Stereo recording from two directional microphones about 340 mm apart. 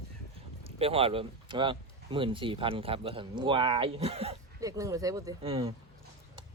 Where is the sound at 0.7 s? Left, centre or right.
Centre.